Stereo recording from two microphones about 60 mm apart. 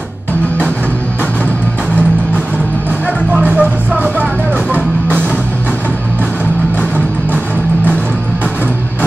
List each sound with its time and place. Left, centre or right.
3.3 s music: right